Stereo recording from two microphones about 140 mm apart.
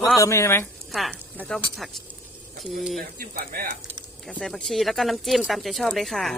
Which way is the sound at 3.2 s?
90° right.